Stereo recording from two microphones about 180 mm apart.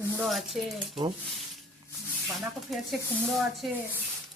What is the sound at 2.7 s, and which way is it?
Speech, centre (ahead or behind).